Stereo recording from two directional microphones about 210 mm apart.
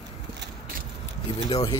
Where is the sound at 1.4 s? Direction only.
25° left (ahead or behind).